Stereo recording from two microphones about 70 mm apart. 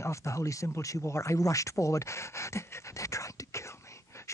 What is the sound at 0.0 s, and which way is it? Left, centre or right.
Speech, left.